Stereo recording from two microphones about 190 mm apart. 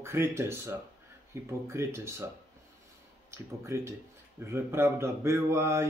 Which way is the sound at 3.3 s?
15° right (ahead or behind).